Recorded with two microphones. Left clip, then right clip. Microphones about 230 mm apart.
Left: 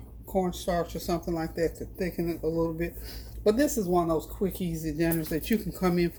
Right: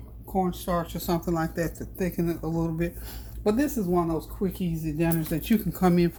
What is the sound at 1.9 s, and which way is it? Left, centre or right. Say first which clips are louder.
Speech: right 2 dB; right.